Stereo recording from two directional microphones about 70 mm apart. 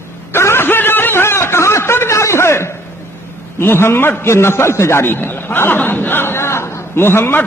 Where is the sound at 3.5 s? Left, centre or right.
Left.